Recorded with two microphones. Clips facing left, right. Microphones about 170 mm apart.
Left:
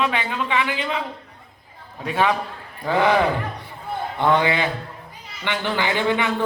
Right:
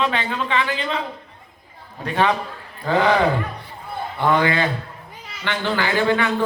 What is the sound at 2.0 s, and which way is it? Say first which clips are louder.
A man's voice: right 1 dB; 5° left (ahead or behind).